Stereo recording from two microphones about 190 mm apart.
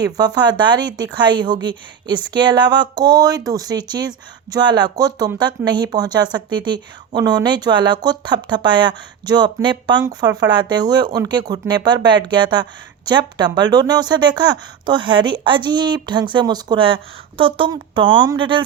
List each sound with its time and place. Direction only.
0.2 s speech: 20° right (ahead or behind)